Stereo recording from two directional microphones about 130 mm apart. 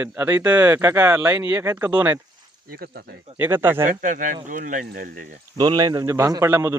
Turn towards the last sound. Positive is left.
turn(degrees=-20)  # may be behind; listen again after turning